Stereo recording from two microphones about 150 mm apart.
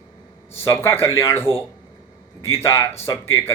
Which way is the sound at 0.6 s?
15° left (ahead or behind).